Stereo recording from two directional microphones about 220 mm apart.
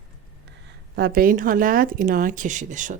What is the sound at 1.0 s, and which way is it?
Speech, 45° right (ahead or behind).